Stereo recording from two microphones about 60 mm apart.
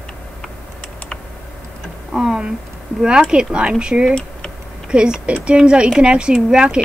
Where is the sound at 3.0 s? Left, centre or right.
Centre.